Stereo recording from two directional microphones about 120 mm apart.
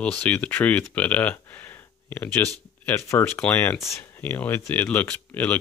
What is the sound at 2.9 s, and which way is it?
Speech, 20° left (ahead or behind).